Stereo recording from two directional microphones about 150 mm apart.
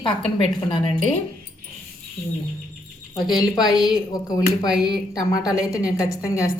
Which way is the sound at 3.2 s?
25° left (ahead or behind).